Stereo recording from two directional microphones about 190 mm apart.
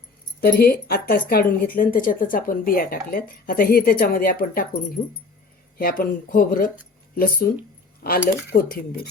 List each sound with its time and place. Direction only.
0.4 s speech: 55° left (ahead or behind)
5.7 s speech: 50° left (ahead or behind)